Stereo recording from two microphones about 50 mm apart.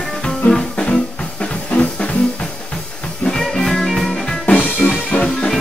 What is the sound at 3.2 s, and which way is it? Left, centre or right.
Music, centre.